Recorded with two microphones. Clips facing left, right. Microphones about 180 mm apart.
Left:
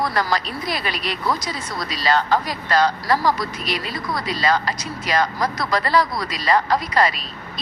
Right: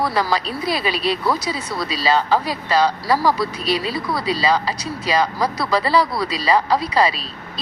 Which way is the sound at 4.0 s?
5° right (ahead or behind).